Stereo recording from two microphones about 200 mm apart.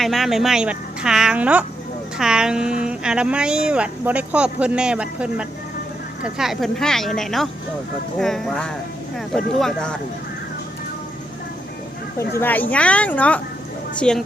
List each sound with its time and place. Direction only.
0.0 s speech: centre (ahead or behind)
12.4 s speech: 10° left (ahead or behind)